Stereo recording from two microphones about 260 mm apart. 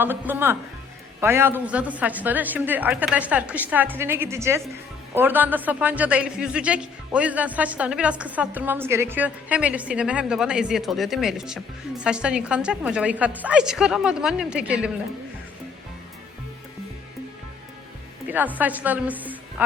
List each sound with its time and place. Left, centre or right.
0.0 s a woman's voice: centre
18.3 s a woman's voice: centre